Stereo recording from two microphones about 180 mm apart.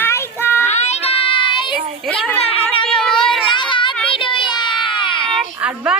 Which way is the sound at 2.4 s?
35° left (ahead or behind).